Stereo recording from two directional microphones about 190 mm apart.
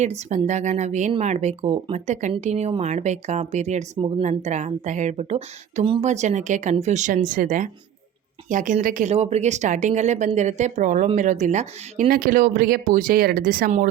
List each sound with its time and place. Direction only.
0.0 s speech: 35° right (ahead or behind); by 13.7 s 50° right (ahead or behind)